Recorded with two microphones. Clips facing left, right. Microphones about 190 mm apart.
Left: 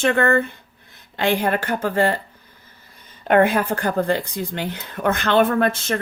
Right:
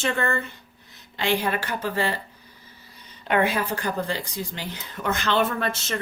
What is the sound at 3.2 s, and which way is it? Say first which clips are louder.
A woman's voice: left 6 dB; 50° left (ahead or behind).